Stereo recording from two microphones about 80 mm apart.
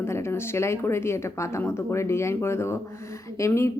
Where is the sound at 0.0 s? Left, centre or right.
Left.